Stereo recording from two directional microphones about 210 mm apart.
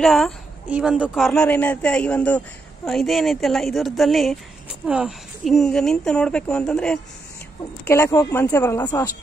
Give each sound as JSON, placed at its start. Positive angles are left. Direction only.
{"t": 0.0, "sound": "a woman's voice", "side_deg": 0}
{"t": 7.9, "sound": "speech", "side_deg": 15}